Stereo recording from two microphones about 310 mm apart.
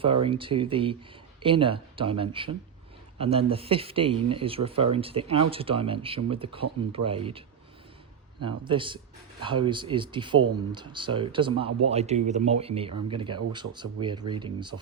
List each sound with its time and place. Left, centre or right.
0.0 s speech: centre